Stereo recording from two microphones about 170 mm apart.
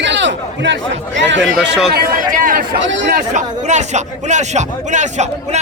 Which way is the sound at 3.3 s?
45° right (ahead or behind).